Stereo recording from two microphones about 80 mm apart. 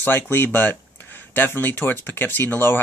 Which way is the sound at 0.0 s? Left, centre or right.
Left.